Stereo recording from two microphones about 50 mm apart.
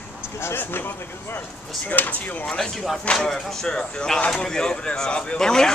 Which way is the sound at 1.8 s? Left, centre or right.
Left.